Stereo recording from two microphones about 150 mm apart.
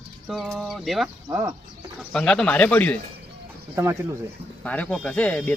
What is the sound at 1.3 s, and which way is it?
Speech, 20° right (ahead or behind).